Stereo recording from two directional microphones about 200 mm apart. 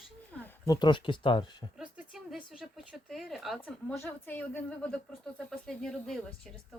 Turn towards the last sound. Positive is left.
turn(degrees=5)  # may be behind; listen again after turning